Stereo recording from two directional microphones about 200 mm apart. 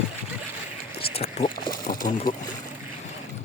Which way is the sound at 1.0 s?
30° left (ahead or behind).